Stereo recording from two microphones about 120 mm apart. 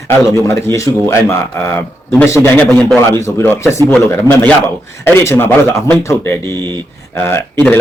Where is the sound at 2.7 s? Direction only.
5° left (ahead or behind).